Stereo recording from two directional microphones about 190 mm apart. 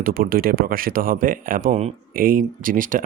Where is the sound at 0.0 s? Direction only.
50° right (ahead or behind).